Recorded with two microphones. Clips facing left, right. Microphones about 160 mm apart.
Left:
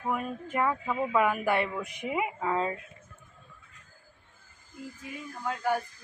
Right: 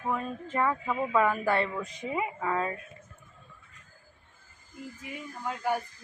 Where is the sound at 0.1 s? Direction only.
10° left (ahead or behind).